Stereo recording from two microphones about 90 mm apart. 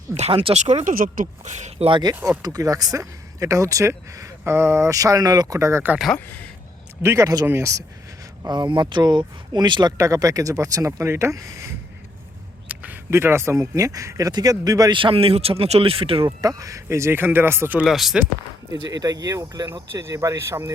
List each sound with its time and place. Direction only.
0.1 s speech: 90° right
1.8 s speech: 90° right
2.4 s speech: 45° right (ahead or behind); by 6.0 s 25° right (ahead or behind)
6.1 s speech: 20° left (ahead or behind)
7.0 s speech: 35° right (ahead or behind)
8.4 s speech: 55° right (ahead or behind)
10.0 s speech: 40° right (ahead or behind)
12.6 s a sound: 20° right (ahead or behind)
13.1 s speech: 30° right (ahead or behind); by 14.9 s 45° right (ahead or behind)
14.9 s speech: 80° right
16.4 s speech: 40° right (ahead or behind); by 17.7 s 25° right (ahead or behind)
17.8 s speech: centre (ahead or behind)
18.7 s speech: 45° right (ahead or behind)
19.9 s speech: 35° right (ahead or behind)